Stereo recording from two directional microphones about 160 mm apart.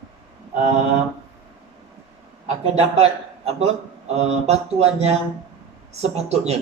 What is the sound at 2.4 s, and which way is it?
A man's voice, 40° right (ahead or behind).